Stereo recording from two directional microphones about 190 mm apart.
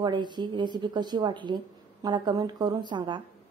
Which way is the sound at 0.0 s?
25° right (ahead or behind).